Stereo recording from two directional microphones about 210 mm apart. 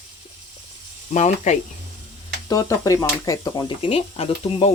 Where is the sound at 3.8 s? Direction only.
30° left (ahead or behind).